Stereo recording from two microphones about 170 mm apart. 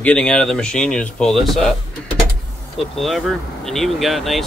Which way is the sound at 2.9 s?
Centre (ahead or behind).